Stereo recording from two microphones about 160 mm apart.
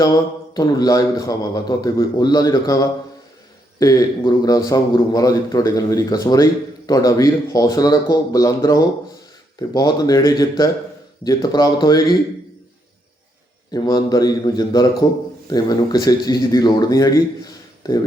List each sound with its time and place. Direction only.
0.0 s a man's voice: 25° left (ahead or behind)
13.7 s a man's voice: 25° left (ahead or behind)